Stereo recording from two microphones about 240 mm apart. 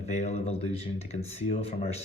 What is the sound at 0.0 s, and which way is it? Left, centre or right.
Speech, left.